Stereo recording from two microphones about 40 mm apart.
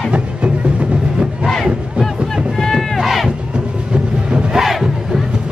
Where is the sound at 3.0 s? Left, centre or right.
Centre.